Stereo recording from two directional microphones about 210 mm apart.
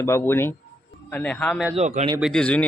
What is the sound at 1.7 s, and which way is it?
Speech, 30° right (ahead or behind).